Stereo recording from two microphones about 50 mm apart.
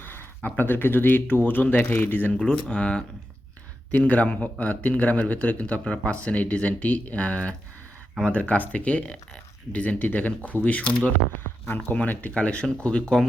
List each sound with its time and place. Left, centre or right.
0.0 s a sound: left
0.4 s speech: left
2.5 s speech: left
9.8 s speech: left
11.6 s speech: left
12.3 s speech: left